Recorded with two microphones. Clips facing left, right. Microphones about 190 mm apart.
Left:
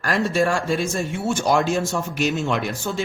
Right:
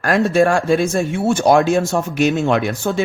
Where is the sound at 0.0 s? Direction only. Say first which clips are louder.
Right 6 dB; 55° right (ahead or behind).